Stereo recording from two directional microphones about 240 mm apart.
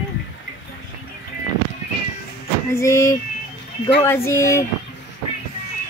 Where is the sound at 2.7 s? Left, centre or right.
Centre.